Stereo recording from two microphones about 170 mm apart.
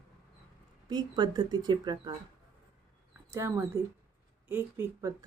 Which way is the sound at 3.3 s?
15° right (ahead or behind).